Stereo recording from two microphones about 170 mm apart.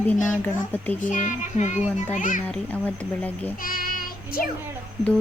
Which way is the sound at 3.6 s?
55° left (ahead or behind).